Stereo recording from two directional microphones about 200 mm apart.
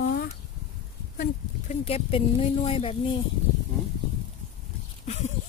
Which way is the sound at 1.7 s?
30° left (ahead or behind).